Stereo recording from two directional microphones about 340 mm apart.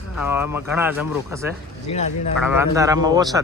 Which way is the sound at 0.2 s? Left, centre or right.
Centre.